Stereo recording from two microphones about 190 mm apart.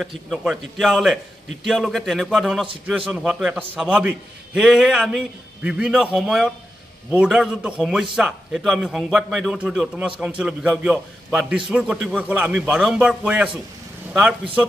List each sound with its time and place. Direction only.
0.3 s a man's voice: centre (ahead or behind)